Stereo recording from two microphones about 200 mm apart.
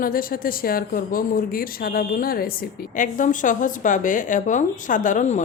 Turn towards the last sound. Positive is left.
turn(degrees=35)  # may be behind; listen again after turning